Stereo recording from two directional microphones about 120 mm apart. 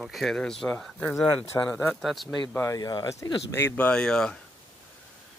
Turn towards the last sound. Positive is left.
turn(degrees=5)  # may be behind; listen again after turning